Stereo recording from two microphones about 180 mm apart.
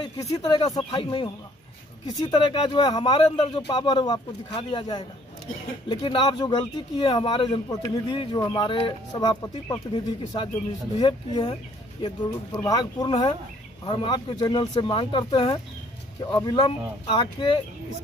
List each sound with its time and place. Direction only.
0.0 s speech: 25° left (ahead or behind)
12.5 s speech: 20° left (ahead or behind)